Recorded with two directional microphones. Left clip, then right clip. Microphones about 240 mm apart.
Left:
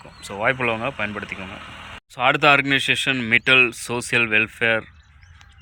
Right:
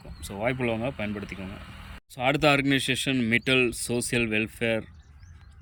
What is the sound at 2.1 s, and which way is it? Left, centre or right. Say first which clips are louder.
Speech: left 7 dB; centre.